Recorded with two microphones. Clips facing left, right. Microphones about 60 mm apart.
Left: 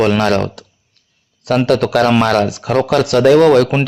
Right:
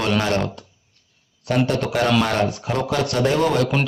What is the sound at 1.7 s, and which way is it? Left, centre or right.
A man's voice, left.